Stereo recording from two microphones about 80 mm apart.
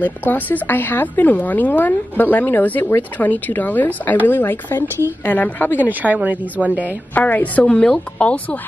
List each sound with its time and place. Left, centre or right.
0.3 s a woman's voice: left
5.9 s a woman's voice: right
7.2 s a woman's voice: centre